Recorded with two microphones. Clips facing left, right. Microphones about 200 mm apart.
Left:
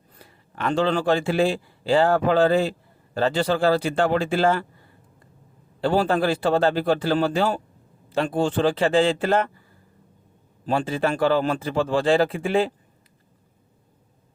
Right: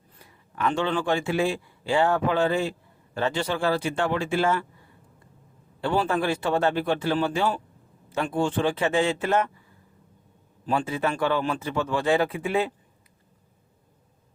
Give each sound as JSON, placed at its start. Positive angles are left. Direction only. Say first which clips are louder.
{"t": 0.2, "sound": "speech", "louder": "right 1 dB", "side_deg": 35}
{"t": 5.8, "sound": "speech", "louder": "left 4 dB", "side_deg": 35}
{"t": 10.7, "sound": "speech", "louder": "left 3 dB", "side_deg": 30}